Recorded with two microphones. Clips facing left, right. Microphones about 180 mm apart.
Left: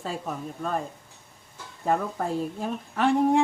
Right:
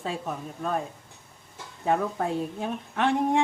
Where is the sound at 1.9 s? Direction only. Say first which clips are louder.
Even; centre (ahead or behind).